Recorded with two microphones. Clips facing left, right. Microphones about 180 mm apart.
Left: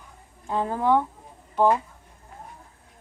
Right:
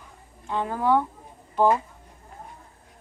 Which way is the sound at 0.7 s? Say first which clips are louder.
Even; 20° left (ahead or behind).